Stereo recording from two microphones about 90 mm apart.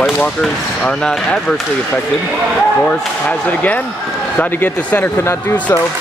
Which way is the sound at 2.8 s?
15° left (ahead or behind).